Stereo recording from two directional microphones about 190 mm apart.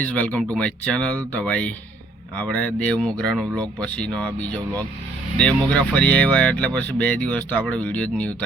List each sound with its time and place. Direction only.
0.0 s speech: 5° left (ahead or behind)